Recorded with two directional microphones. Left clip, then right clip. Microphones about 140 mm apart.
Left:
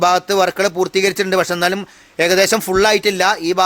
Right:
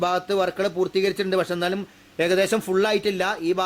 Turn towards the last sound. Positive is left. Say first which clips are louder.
# left 8 dB
turn(degrees=25)  # may be behind; listen again after turning